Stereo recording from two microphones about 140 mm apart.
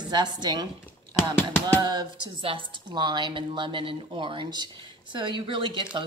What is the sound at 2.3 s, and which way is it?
Speech, 40° right (ahead or behind).